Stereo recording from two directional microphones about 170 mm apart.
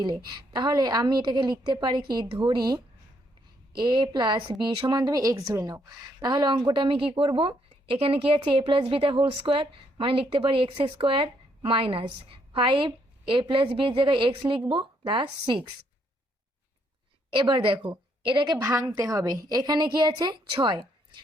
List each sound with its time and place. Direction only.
0.3 s a woman's voice: 25° right (ahead or behind)
17.3 s a woman's voice: 30° right (ahead or behind)